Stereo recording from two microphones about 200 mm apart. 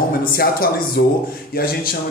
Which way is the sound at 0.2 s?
45° left (ahead or behind).